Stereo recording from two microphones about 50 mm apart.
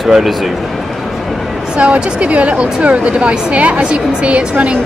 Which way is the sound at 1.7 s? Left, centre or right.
Right.